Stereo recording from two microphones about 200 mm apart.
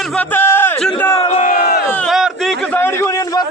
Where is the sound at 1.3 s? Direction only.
40° left (ahead or behind).